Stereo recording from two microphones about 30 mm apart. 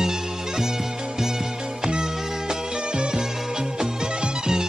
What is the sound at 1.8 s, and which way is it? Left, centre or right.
Music, right.